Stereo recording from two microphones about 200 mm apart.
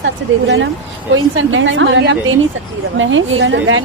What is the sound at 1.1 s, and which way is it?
A woman's voice, 75° right (ahead or behind).